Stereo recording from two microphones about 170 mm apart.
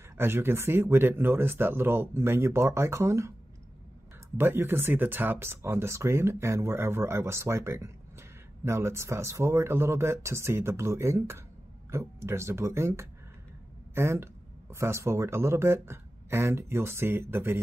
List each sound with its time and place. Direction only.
0.2 s speech: 15° right (ahead or behind)
4.4 s speech: 15° right (ahead or behind)